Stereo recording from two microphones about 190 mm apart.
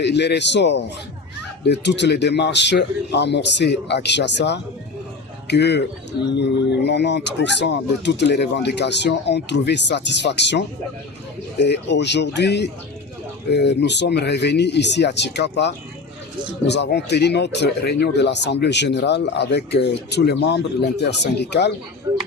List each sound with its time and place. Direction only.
0.0 s speech: 65° left (ahead or behind)
11.6 s speech: 65° left (ahead or behind)